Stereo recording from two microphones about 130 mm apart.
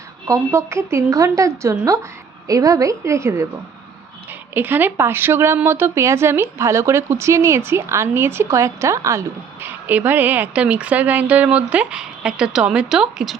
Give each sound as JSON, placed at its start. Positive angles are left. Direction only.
{"t": 0.3, "sound": "speech", "side_deg": -20}